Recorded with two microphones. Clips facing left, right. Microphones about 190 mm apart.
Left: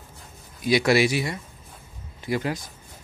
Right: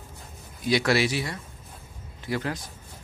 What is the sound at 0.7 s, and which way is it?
A man's voice, 15° left (ahead or behind).